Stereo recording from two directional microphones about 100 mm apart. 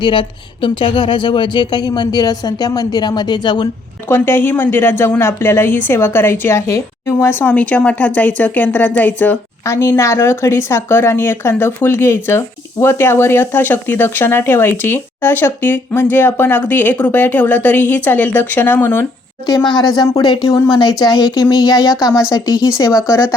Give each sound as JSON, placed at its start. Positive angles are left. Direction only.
{"t": 0.0, "sound": "speech", "side_deg": 55}
{"t": 4.1, "sound": "speech", "side_deg": 20}
{"t": 19.5, "sound": "speech", "side_deg": 40}